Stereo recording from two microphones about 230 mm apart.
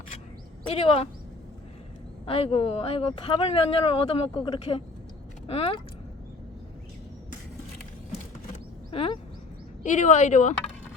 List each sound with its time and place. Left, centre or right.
0.7 s speech: left
2.2 s speech: left
8.9 s speech: left